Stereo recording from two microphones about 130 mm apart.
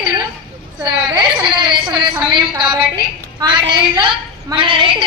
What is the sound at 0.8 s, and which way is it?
A woman's voice, 35° right (ahead or behind).